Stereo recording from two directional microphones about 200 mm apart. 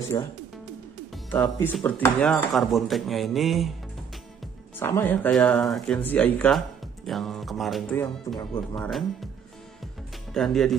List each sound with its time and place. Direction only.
0.1 s speech: 20° left (ahead or behind)
1.3 s speech: 10° left (ahead or behind)
4.7 s speech: 10° left (ahead or behind)
10.3 s speech: centre (ahead or behind)